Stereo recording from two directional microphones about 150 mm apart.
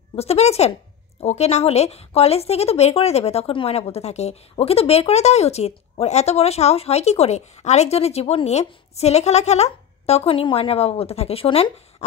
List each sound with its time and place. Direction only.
0.1 s a woman's voice: 45° left (ahead or behind)